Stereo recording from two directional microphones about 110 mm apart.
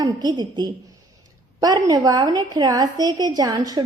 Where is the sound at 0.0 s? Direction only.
35° right (ahead or behind).